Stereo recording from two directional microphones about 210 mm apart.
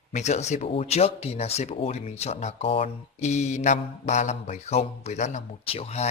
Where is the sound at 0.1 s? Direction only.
35° left (ahead or behind).